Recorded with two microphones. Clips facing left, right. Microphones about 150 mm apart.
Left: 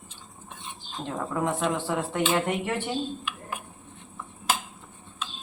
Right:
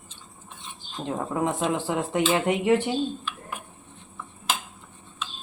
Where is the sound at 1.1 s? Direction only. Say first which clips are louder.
Right 2 dB; 20° right (ahead or behind).